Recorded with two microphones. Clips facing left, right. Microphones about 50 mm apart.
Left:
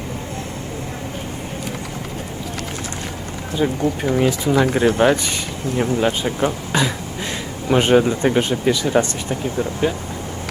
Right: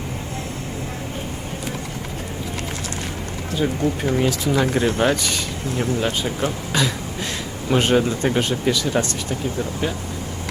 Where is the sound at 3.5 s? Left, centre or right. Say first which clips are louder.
Left 2 dB; centre.